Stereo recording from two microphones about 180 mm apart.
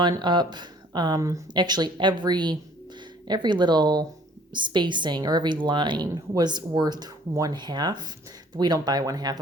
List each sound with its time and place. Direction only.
0.0 s a woman's voice: 25° right (ahead or behind)